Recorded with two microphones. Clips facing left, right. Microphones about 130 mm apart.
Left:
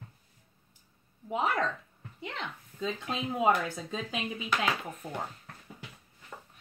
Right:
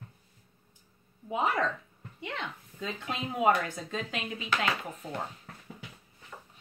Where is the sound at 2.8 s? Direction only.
Centre (ahead or behind).